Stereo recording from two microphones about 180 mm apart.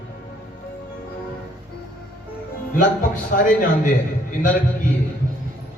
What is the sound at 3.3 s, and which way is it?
Speech, 50° left (ahead or behind).